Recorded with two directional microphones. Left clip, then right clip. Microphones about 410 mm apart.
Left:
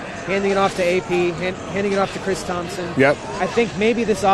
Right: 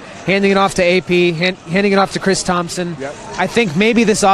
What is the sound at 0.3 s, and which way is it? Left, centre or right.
A man's voice, right.